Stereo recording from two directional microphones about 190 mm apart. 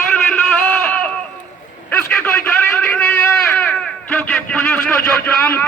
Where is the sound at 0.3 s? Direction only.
5° left (ahead or behind).